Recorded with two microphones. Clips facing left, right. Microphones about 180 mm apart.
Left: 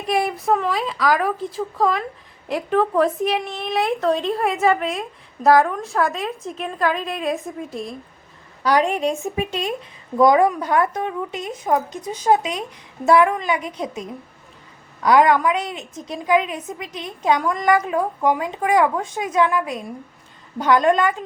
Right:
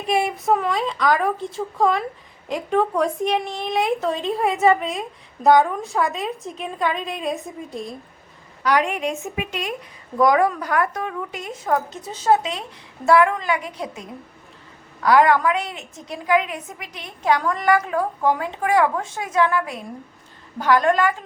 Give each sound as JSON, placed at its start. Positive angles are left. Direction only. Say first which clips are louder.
{"t": 0.3, "sound": "a woman's voice", "louder": "even", "side_deg": 0}
{"t": 8.6, "sound": "a woman's voice", "louder": "left 2 dB", "side_deg": 35}